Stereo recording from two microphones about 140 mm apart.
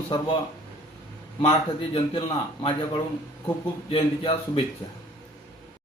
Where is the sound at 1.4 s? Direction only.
45° left (ahead or behind).